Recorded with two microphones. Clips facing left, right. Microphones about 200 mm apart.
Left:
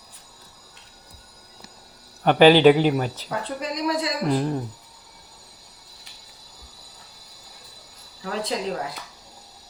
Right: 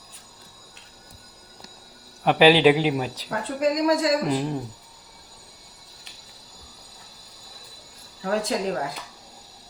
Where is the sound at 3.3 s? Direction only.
45° right (ahead or behind).